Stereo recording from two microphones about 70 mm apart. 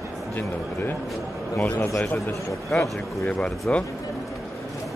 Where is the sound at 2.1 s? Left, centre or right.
Left.